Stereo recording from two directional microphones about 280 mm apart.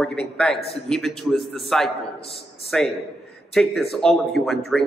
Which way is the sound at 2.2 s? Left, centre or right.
Left.